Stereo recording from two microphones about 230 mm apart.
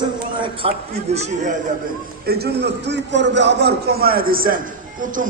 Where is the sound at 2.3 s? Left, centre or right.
Right.